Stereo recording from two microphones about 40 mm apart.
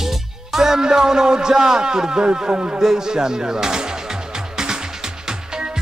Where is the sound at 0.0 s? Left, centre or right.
Centre; by 2.8 s right.